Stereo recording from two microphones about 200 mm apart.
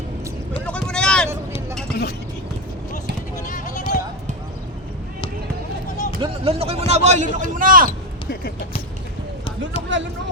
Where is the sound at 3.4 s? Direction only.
40° left (ahead or behind).